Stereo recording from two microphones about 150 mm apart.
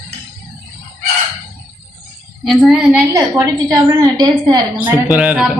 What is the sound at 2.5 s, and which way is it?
Speech, centre (ahead or behind).